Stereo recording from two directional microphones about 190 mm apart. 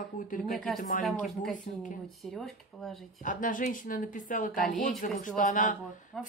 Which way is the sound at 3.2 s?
45° left (ahead or behind).